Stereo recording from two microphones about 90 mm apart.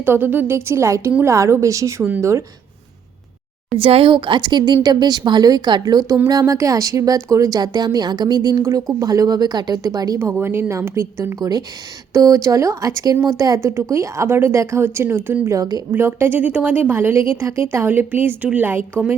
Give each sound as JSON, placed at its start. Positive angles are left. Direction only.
{"t": 0.0, "sound": "a woman's voice", "side_deg": -20}
{"t": 3.8, "sound": "a woman's voice", "side_deg": -85}
{"t": 10.4, "sound": "a woman's voice", "side_deg": -30}
{"t": 11.3, "sound": "a woman's voice", "side_deg": -45}
{"t": 13.6, "sound": "a woman's voice", "side_deg": -30}
{"t": 15.4, "sound": "speech", "side_deg": -40}
{"t": 15.9, "sound": "a woman's voice", "side_deg": -25}